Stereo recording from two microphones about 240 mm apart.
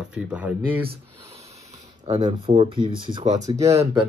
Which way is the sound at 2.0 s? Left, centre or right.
Right.